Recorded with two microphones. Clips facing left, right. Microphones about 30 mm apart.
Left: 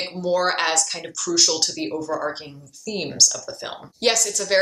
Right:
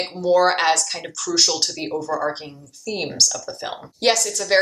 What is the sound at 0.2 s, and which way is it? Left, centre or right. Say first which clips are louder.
A woman's voice: right 4 dB; centre.